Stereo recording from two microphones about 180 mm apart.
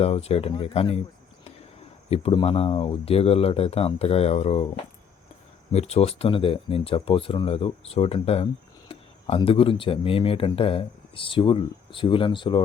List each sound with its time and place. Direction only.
0.0 s speech: 35° left (ahead or behind)
2.0 s speech: 35° left (ahead or behind)
5.7 s speech: 35° left (ahead or behind)